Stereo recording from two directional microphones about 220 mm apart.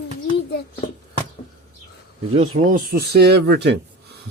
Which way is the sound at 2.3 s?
30° right (ahead or behind).